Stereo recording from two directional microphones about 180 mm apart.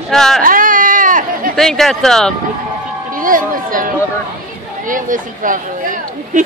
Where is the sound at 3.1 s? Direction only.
50° right (ahead or behind).